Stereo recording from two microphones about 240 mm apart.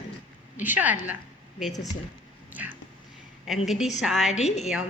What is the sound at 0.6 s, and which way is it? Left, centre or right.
Speech, centre.